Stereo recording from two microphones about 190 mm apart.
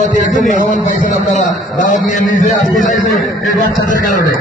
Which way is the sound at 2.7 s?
45° left (ahead or behind).